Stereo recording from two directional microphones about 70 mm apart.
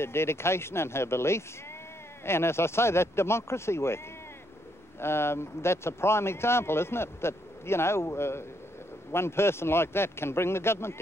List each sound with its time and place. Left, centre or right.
0.0 s speech: left
5.0 s speech: left